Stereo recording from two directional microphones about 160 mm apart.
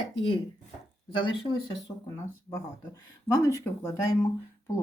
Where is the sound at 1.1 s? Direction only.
30° left (ahead or behind).